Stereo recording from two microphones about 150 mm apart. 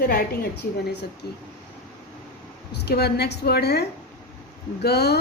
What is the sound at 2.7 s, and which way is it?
A woman's voice, 90° left.